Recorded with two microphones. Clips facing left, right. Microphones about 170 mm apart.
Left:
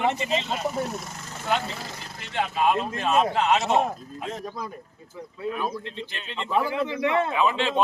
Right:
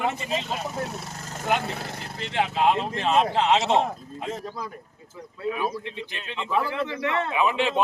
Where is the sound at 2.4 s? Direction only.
25° right (ahead or behind).